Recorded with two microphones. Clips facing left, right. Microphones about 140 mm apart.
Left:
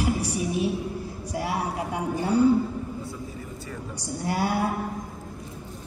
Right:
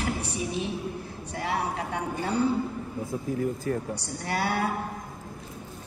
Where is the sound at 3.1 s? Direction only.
85° right.